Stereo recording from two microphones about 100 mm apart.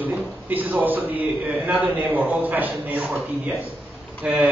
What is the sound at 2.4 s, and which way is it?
Speech, 15° right (ahead or behind).